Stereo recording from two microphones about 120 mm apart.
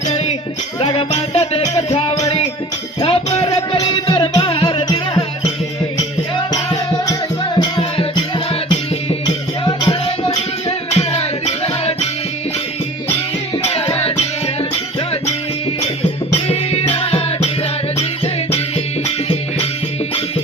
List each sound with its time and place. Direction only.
0.8 s music: 40° left (ahead or behind)
1.3 s music: 60° left (ahead or behind)
6.0 s music: 40° left (ahead or behind); by 12.0 s 60° left (ahead or behind)
13.6 s music: 55° left (ahead or behind)
16.3 s music: 60° left (ahead or behind)
19.0 s music: 55° left (ahead or behind)